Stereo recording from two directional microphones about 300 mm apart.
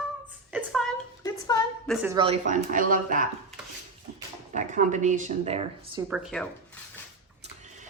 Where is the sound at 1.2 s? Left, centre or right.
Centre.